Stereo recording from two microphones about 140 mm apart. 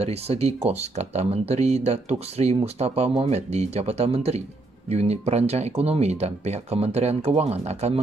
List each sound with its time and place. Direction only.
0.0 s speech: 50° right (ahead or behind)